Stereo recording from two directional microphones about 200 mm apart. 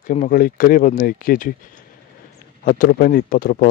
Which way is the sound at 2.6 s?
45° left (ahead or behind).